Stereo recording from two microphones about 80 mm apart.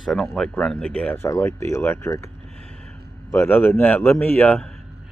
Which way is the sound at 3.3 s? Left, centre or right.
Left.